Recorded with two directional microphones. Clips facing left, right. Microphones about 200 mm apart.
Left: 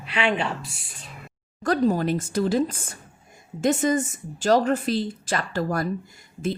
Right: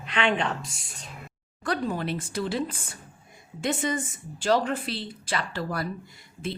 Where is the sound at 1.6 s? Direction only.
40° left (ahead or behind).